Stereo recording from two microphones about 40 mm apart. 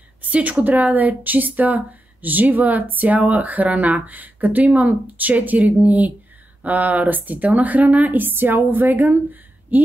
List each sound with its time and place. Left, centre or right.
0.2 s speech: right